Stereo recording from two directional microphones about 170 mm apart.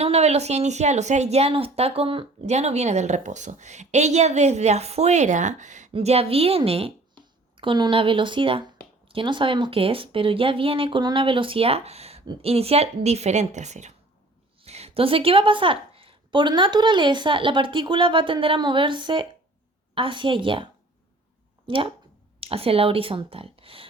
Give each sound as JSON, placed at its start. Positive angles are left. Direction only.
{"t": 0.0, "sound": "a woman's voice", "side_deg": -40}
{"t": 21.7, "sound": "speech", "side_deg": -30}